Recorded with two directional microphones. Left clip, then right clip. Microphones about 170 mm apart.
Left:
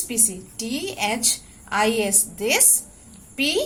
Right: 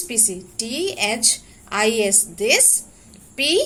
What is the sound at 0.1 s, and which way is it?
A woman's voice, 20° right (ahead or behind).